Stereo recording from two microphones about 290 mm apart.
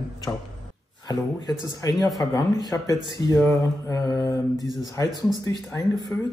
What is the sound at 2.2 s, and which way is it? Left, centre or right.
Speech, centre.